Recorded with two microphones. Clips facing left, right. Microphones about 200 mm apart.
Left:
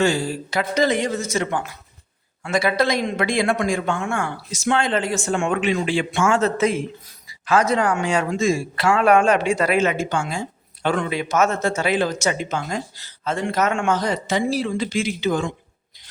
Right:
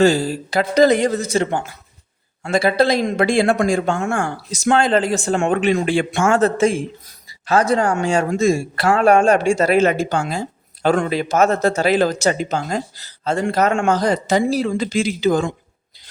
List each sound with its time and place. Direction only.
0.0 s a man's voice: 40° right (ahead or behind)
5.6 s a man's voice: 50° right (ahead or behind)
6.6 s a man's voice: 30° right (ahead or behind)